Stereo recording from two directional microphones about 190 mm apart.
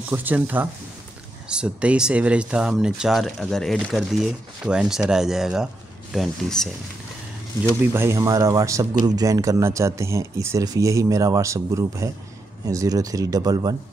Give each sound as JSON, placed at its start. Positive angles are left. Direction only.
{"t": 0.1, "sound": "speech", "side_deg": -10}
{"t": 7.8, "sound": "speech", "side_deg": -15}